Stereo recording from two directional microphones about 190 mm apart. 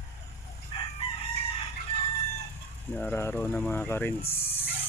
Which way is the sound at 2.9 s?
10° left (ahead or behind).